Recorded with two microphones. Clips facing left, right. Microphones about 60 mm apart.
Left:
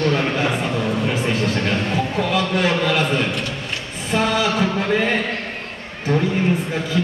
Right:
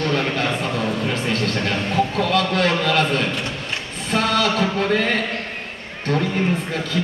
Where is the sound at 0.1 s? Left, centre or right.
Centre.